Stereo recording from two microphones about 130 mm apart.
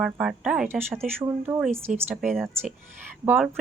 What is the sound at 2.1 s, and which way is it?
Speech, 5° right (ahead or behind).